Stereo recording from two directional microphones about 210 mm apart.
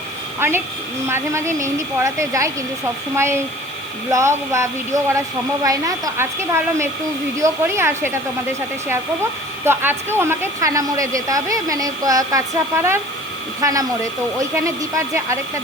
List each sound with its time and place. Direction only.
0.3 s a woman's voice: 10° right (ahead or behind)
9.6 s a woman's voice: 10° right (ahead or behind)